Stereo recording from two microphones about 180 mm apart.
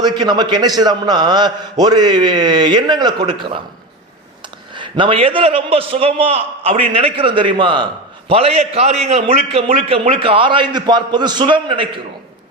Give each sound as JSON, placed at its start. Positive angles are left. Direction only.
{"t": 0.0, "sound": "a man's voice", "side_deg": -25}
{"t": 4.7, "sound": "a man's voice", "side_deg": -25}